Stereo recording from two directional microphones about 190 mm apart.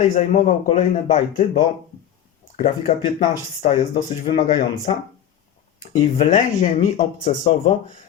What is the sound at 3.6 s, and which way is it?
Speech, 25° left (ahead or behind).